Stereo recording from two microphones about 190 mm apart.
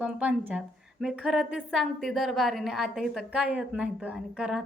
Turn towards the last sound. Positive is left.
turn(degrees=-5)  # may be behind; listen again after turning